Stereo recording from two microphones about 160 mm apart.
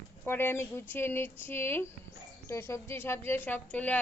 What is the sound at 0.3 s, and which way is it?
A woman's voice, 15° left (ahead or behind).